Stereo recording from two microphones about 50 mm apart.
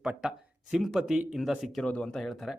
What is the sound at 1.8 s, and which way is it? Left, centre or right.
Speech, left.